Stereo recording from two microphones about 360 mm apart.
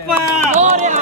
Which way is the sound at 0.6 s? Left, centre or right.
Centre.